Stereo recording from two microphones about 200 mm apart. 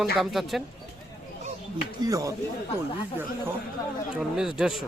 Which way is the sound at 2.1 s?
15° right (ahead or behind).